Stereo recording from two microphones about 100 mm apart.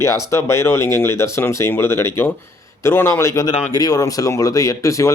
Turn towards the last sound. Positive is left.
turn(degrees=30)  # may be behind; listen again after turning